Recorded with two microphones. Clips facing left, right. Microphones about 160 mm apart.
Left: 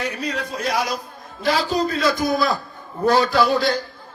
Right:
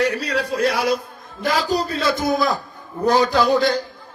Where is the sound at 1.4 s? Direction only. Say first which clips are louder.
Even; 45° right (ahead or behind).